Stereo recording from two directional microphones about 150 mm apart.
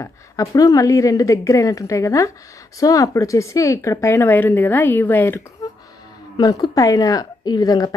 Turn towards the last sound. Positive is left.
turn(degrees=25)  # may be behind; listen again after turning